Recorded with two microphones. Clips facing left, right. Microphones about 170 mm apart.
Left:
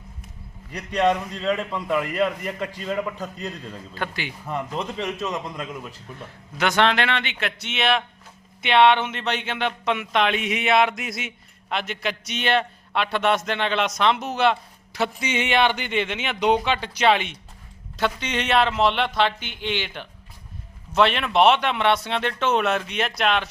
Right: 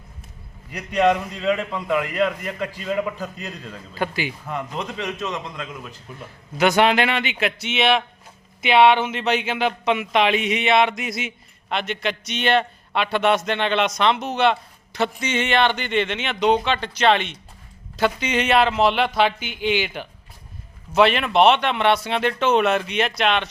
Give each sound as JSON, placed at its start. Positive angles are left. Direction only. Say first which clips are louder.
{"t": 0.7, "sound": "speech", "louder": "right 2 dB", "side_deg": -5}
{"t": 4.9, "sound": "a man's voice", "louder": "even", "side_deg": 30}
{"t": 6.1, "sound": "a man's voice", "louder": "right 6 dB", "side_deg": -10}
{"t": 17.9, "sound": "speech", "louder": "right 4 dB", "side_deg": -5}